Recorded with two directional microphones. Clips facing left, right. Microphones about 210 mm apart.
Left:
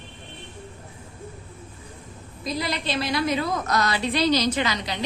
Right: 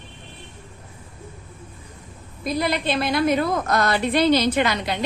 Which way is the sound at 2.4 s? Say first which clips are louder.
Right 5 dB; 55° right (ahead or behind).